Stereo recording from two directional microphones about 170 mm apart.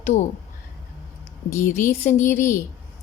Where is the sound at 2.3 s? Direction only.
15° left (ahead or behind).